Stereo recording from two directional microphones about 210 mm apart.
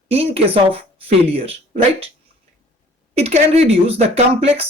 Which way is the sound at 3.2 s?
30° right (ahead or behind).